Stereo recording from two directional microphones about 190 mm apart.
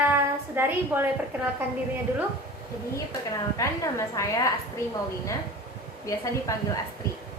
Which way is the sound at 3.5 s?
15° left (ahead or behind).